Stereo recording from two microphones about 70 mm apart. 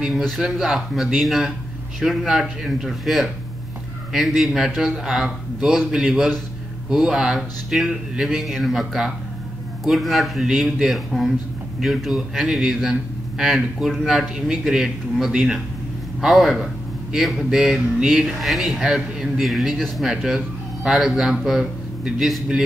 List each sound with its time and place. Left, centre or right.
0.1 s speech: centre
4.4 s a man's voice: centre